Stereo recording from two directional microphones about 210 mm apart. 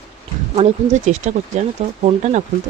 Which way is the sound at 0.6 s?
35° right (ahead or behind).